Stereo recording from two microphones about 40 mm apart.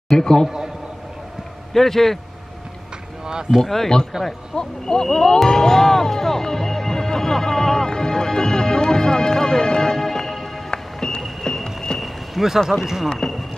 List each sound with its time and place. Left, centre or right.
0.1 s a man's voice: centre
1.7 s a man's voice: centre
3.3 s speech: centre
3.6 s a man's voice: centre
4.1 s speech: centre
4.6 s speech: centre
10.7 s music: centre
12.0 s a sound: centre
12.8 s speech: centre
13.1 s speech: centre